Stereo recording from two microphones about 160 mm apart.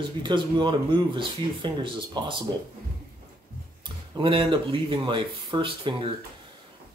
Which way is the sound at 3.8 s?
30° right (ahead or behind).